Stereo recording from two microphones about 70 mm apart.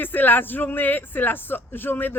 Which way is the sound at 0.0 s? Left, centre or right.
Left.